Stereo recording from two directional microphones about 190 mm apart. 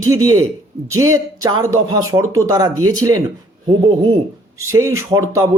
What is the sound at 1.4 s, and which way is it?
Speech, 20° right (ahead or behind).